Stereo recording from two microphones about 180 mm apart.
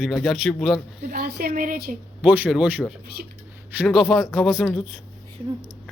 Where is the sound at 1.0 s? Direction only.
60° right (ahead or behind).